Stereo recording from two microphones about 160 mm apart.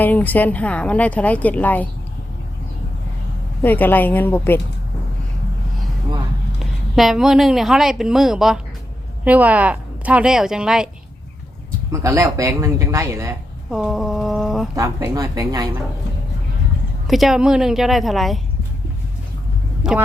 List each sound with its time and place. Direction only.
0.0 s speech: 10° left (ahead or behind)
3.6 s speech: 10° left (ahead or behind)
6.9 s a woman's voice: centre (ahead or behind)
11.9 s a woman's voice: 20° right (ahead or behind)
13.7 s speech: 5° right (ahead or behind)
14.8 s speech: 20° right (ahead or behind)
17.1 s speech: centre (ahead or behind)
19.8 s speech: 5° right (ahead or behind)